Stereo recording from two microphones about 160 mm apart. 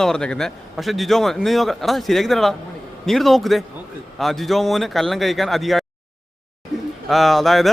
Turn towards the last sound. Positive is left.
turn(degrees=0)  # may be behind; listen again after turning